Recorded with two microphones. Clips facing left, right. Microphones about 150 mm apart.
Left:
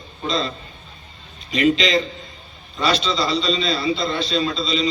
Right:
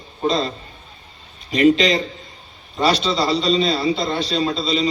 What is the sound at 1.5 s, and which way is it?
A man's voice, 45° right (ahead or behind).